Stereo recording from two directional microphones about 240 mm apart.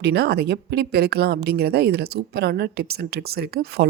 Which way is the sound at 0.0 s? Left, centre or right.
Right.